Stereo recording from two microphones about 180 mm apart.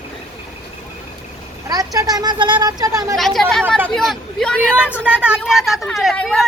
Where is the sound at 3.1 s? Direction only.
Centre (ahead or behind).